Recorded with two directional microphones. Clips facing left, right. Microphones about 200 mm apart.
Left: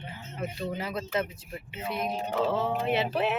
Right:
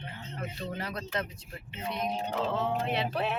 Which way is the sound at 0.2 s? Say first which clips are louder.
Left 5 dB; 5° left (ahead or behind).